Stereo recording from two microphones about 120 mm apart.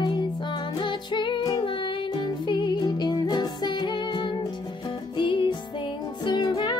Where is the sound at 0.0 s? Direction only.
40° left (ahead or behind).